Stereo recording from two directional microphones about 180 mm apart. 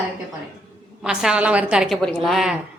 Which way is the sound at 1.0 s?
5° right (ahead or behind).